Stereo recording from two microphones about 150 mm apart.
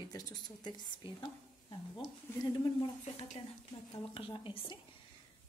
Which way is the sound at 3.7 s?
40° left (ahead or behind).